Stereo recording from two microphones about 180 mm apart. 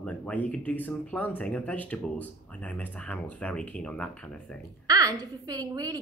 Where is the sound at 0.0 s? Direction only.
5° left (ahead or behind).